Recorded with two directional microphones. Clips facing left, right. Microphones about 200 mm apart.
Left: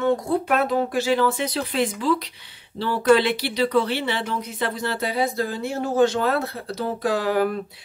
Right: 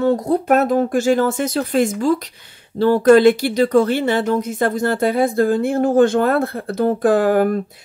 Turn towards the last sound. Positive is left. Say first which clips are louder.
# right 6 dB
turn(degrees=-50)  # may be behind; listen again after turning